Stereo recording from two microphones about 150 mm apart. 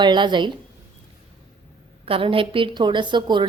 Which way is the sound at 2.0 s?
35° right (ahead or behind).